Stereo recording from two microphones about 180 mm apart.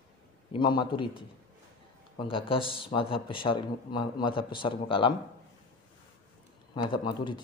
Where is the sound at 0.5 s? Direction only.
25° left (ahead or behind).